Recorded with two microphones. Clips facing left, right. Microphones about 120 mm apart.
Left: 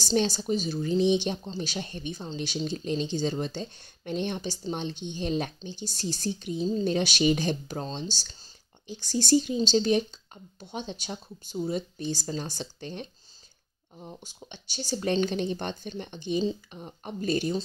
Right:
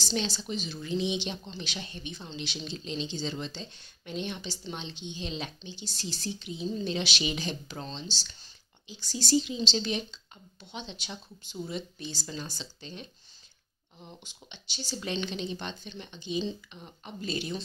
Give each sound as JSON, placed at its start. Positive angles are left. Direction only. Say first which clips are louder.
{"t": 0.0, "sound": "speech", "louder": "left 7 dB", "side_deg": 45}
{"t": 14.5, "sound": "speech", "louder": "left 6 dB", "side_deg": 45}
{"t": 16.4, "sound": "speech", "louder": "left 6 dB", "side_deg": 40}